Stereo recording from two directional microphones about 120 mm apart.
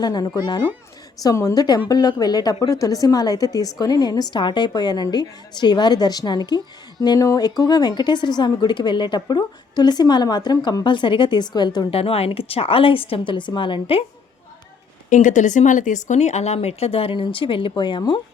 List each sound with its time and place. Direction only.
0.0 s a woman's voice: 35° left (ahead or behind)
11.9 s a woman's voice: 55° left (ahead or behind)
15.1 s speech: 90° left; by 18.2 s 40° left (ahead or behind)